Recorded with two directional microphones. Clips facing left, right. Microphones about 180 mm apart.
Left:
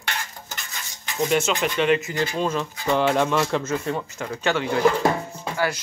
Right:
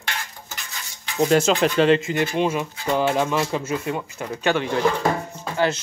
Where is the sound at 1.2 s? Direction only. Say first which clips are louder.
Right 4 dB; 35° right (ahead or behind).